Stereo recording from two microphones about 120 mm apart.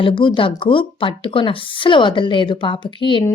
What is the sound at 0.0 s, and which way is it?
A woman's voice, 45° left (ahead or behind).